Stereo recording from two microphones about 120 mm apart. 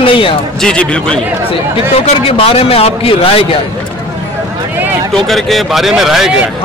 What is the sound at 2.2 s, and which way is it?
A man's voice, 50° left (ahead or behind).